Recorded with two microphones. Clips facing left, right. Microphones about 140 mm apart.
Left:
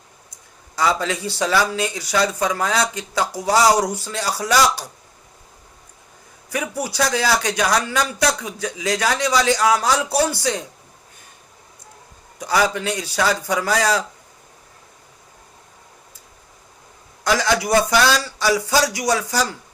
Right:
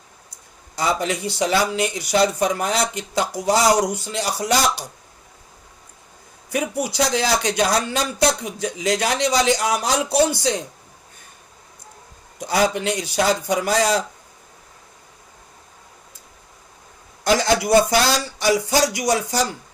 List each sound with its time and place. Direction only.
0.8 s speech: 25° right (ahead or behind)
6.6 s speech: 20° right (ahead or behind)
12.4 s speech: 25° right (ahead or behind)
17.2 s speech: 25° right (ahead or behind)